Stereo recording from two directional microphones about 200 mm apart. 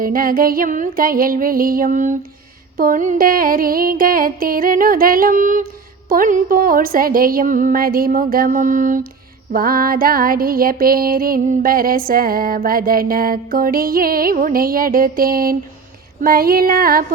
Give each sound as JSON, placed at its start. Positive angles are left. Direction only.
{"t": 0.0, "sound": "music", "side_deg": -45}